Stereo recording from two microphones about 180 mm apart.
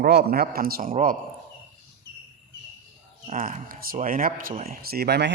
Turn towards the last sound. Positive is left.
turn(degrees=-65)  # may be behind; listen again after turning